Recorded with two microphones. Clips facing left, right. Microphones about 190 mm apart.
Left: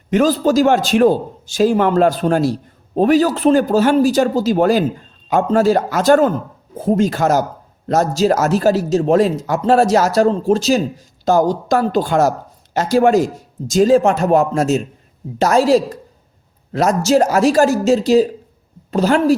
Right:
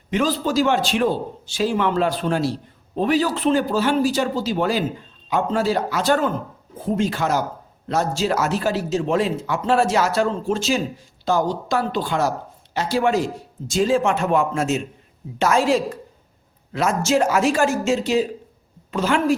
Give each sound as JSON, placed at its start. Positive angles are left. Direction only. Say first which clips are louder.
{"t": 0.1, "sound": "a man's voice", "louder": "left 7 dB", "side_deg": 45}